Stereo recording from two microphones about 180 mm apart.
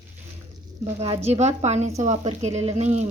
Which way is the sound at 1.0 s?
35° right (ahead or behind).